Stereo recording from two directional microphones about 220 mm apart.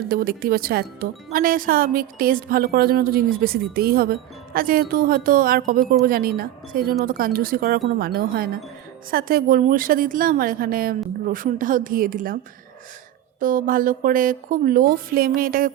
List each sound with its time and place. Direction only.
0.1 s speech: 40° right (ahead or behind)
13.4 s speech: 40° right (ahead or behind)